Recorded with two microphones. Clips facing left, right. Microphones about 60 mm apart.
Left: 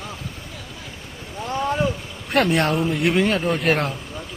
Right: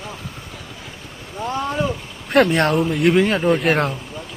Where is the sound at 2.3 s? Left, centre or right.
Centre.